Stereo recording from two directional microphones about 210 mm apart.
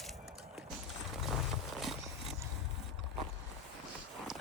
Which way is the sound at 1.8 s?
Centre (ahead or behind).